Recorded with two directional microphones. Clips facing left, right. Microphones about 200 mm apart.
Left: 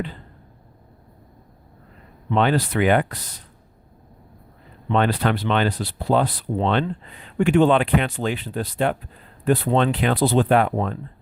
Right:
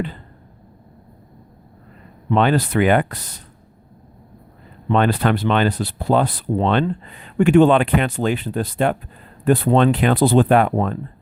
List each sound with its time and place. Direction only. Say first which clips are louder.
2.3 s speech: right 3 dB; 50° right (ahead or behind)
4.9 s speech: right 3 dB; 50° right (ahead or behind)